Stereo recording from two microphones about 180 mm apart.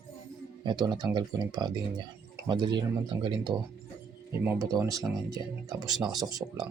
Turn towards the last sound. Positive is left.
turn(degrees=-20)  # may be behind; listen again after turning